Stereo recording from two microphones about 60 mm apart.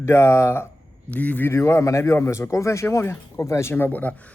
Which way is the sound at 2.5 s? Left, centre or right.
Left.